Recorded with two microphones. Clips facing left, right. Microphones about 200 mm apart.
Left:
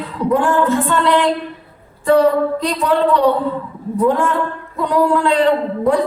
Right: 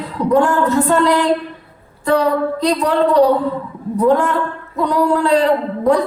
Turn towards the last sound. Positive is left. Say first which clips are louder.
# even
turn(degrees=-35)  # may be behind; listen again after turning